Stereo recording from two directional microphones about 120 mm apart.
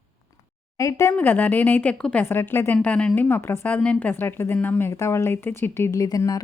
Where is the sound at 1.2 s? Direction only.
15° left (ahead or behind).